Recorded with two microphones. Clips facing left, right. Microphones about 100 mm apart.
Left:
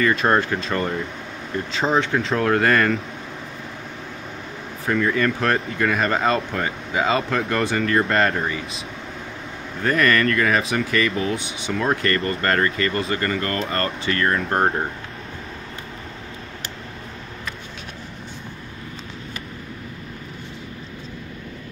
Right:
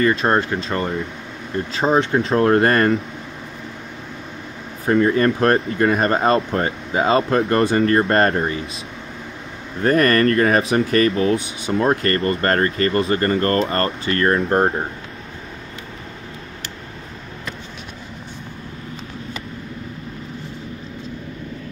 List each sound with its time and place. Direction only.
0.0 s speech: 30° right (ahead or behind)
2.0 s speech: 30° right (ahead or behind)
4.8 s speech: 35° right (ahead or behind)
9.8 s speech: 40° right (ahead or behind)